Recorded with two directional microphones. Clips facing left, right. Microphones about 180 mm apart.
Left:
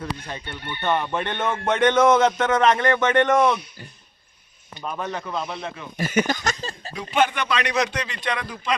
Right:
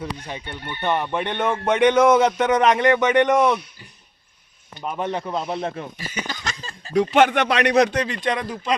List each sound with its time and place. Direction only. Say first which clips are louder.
0.3 s speech: right 1 dB; 15° right (ahead or behind)
4.8 s speech: right 3 dB; 25° right (ahead or behind); by 5.8 s 45° right (ahead or behind)
6.0 s a sound: left 9 dB; 50° left (ahead or behind)
6.9 s speech: right 6 dB; 75° right (ahead or behind); by 8.4 s 45° right (ahead or behind)